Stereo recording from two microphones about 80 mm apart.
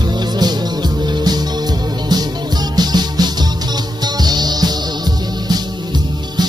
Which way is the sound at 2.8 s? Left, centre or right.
Right.